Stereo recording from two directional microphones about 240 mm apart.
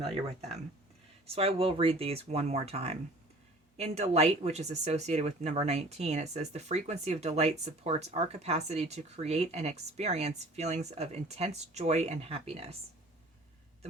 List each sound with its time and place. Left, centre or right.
0.0 s speech: right